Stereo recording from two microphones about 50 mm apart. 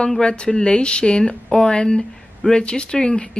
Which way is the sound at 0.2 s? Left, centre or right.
Centre.